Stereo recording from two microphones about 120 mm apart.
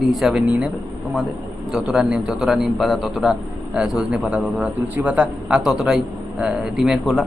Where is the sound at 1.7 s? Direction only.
5° right (ahead or behind).